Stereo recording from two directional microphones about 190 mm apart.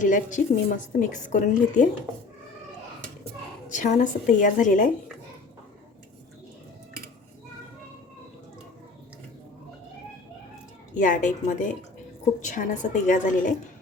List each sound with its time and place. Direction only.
0.0 s a woman's voice: 40° left (ahead or behind)
3.7 s a woman's voice: 40° left (ahead or behind)
10.9 s a woman's voice: 40° left (ahead or behind)